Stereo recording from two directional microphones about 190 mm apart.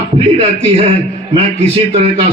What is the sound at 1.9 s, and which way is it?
Music, 30° right (ahead or behind).